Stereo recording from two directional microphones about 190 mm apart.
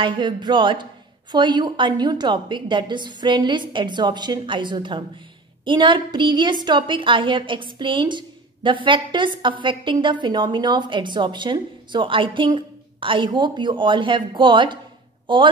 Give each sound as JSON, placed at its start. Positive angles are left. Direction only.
{"t": 0.0, "sound": "a woman's voice", "side_deg": -25}